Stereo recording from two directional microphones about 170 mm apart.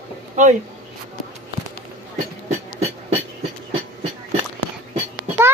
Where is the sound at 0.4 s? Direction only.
45° right (ahead or behind).